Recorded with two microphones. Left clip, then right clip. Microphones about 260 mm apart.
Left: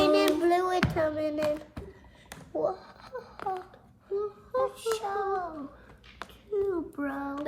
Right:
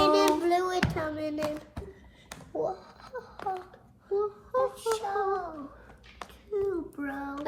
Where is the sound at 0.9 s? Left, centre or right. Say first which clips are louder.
Left 4 dB; left.